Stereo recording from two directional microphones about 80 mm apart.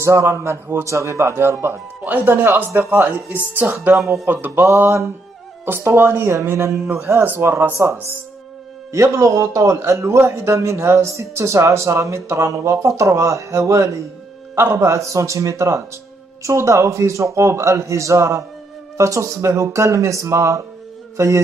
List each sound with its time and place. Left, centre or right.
0.0 s speech: right
2.9 s speech: right
3.9 s speech: right